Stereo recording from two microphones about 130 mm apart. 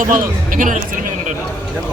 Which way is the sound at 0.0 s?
90° right.